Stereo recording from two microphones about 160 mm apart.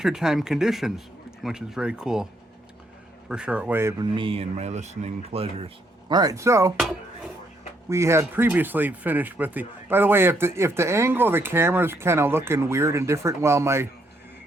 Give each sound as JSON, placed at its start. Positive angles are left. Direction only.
{"t": 0.0, "sound": "speech", "side_deg": -5}
{"t": 3.2, "sound": "speech", "side_deg": -5}
{"t": 4.1, "sound": "speech", "side_deg": -35}
{"t": 6.7, "sound": "speech", "side_deg": -5}
{"t": 7.9, "sound": "speech", "side_deg": -20}